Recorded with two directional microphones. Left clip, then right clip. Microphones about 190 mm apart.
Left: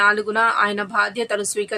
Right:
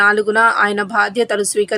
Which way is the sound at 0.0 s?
20° right (ahead or behind).